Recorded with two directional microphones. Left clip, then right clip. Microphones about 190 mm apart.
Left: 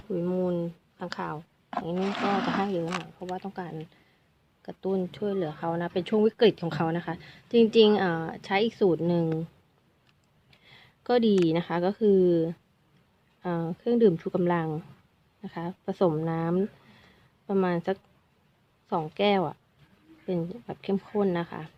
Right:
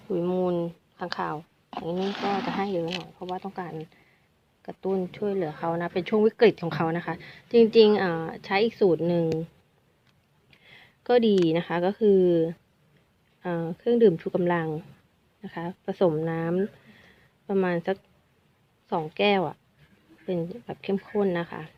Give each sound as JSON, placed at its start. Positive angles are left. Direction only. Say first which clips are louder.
{"t": 0.1, "sound": "speech", "louder": "right 3 dB", "side_deg": 5}
{"t": 10.5, "sound": "speech", "louder": "right 3 dB", "side_deg": 15}